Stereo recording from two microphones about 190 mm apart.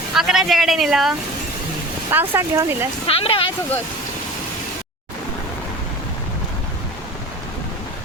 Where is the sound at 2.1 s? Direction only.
10° right (ahead or behind).